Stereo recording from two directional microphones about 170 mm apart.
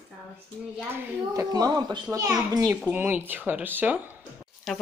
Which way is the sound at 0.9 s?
20° right (ahead or behind).